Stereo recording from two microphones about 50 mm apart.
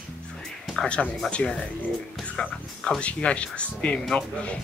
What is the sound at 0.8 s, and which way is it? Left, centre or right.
A man's voice, centre.